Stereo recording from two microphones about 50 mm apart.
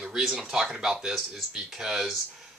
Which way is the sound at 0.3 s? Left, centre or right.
Centre.